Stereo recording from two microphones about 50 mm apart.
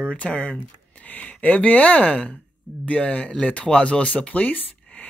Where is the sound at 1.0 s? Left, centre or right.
Left.